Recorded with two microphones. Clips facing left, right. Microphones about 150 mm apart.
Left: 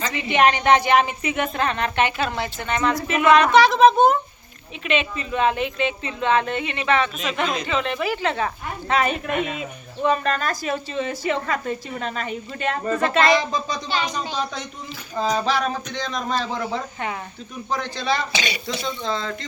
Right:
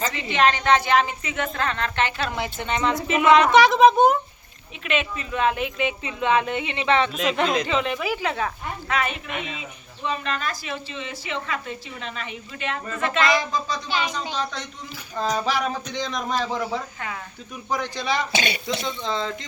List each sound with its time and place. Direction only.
0.1 s a woman's voice: 15° left (ahead or behind)
2.6 s speech: 20° right (ahead or behind)
4.8 s speech: centre (ahead or behind); by 7.1 s 25° right (ahead or behind)
7.7 s speech: 15° right (ahead or behind)
8.9 s speech: 40° left (ahead or behind)
13.3 s speech: 25° left (ahead or behind)
15.1 s speech: centre (ahead or behind)
15.4 s speech: 10° right (ahead or behind)
18.3 s speech: 55° right (ahead or behind)
19.0 s speech: 20° right (ahead or behind)